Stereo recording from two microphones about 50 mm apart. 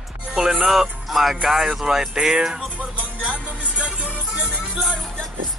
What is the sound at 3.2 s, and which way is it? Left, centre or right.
Music, right.